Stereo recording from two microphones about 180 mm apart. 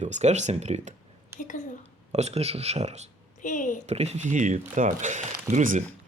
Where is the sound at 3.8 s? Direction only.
35° right (ahead or behind).